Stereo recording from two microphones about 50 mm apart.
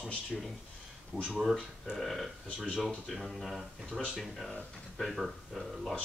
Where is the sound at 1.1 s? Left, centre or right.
Centre.